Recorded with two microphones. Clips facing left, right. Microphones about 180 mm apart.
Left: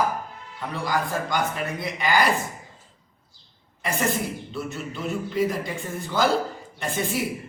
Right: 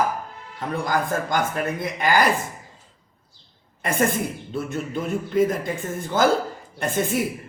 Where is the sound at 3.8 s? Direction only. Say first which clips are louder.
Right 3 dB; 50° right (ahead or behind).